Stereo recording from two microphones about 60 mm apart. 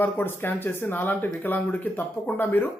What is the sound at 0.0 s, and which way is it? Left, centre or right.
Speech, left.